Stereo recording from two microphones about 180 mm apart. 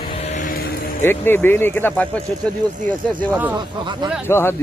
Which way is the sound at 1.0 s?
10° left (ahead or behind).